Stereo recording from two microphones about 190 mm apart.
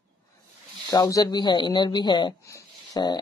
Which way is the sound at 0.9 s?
20° left (ahead or behind).